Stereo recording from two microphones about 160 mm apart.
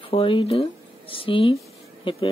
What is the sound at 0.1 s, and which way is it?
Speech, 35° left (ahead or behind).